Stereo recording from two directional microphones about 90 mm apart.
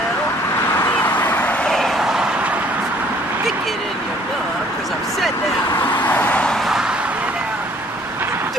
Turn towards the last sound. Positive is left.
turn(degrees=-5)  # may be behind; listen again after turning